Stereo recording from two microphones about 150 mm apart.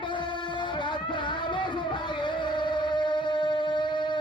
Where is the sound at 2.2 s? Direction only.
30° left (ahead or behind).